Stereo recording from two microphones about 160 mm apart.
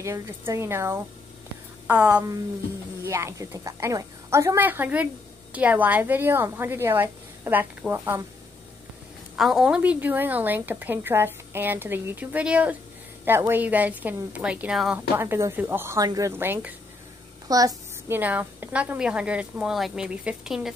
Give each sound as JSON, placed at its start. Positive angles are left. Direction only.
{"t": 0.0, "sound": "a woman's voice", "side_deg": -15}
{"t": 9.4, "sound": "a woman's voice", "side_deg": 0}